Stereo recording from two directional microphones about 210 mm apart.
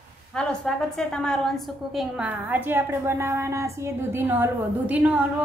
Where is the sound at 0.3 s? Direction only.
5° left (ahead or behind).